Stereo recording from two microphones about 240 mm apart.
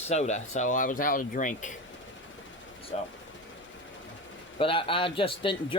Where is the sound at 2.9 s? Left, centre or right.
Left.